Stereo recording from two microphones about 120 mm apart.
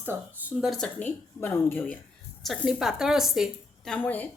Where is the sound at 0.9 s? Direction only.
15° left (ahead or behind).